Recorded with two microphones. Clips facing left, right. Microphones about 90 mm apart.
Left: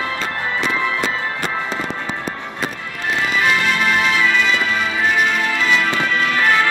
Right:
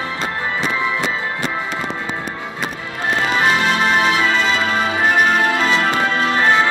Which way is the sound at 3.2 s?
35° right (ahead or behind).